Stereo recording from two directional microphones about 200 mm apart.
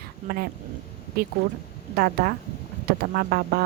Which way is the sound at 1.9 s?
50° right (ahead or behind).